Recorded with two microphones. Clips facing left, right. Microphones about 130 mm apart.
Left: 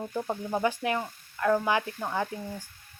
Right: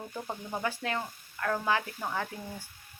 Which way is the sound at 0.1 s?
15° left (ahead or behind).